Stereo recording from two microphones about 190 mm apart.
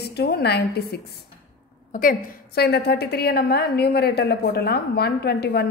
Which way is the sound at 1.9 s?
45° left (ahead or behind).